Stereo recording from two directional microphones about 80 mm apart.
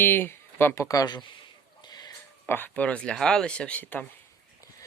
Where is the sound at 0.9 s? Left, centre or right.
Left.